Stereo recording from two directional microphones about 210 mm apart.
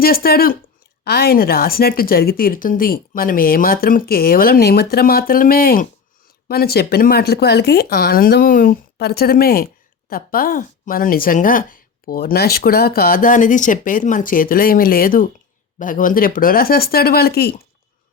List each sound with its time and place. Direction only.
0.0 s speech: 45° left (ahead or behind)